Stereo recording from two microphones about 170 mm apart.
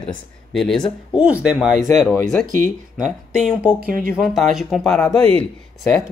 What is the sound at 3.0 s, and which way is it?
Speech, 5° right (ahead or behind).